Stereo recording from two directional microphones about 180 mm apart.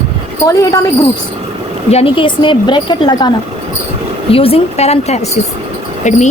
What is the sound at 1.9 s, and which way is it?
A woman's voice, 30° left (ahead or behind).